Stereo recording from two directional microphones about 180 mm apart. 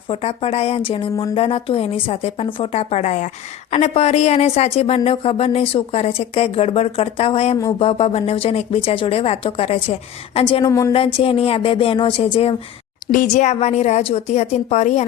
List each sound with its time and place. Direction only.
0.1 s speech: 35° left (ahead or behind)
10.7 s speech: 15° left (ahead or behind)
10.9 s speech: 30° left (ahead or behind)
13.1 s speech: 45° left (ahead or behind)